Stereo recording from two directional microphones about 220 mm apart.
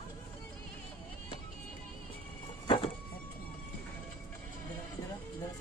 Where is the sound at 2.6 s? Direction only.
25° left (ahead or behind).